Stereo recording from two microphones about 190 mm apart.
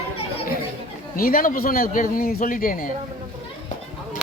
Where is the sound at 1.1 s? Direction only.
50° left (ahead or behind).